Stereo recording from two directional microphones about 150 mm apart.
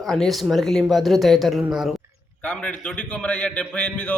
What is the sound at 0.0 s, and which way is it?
Speech, centre (ahead or behind).